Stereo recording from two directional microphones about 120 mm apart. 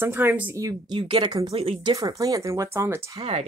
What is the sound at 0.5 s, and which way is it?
Speech, 30° right (ahead or behind).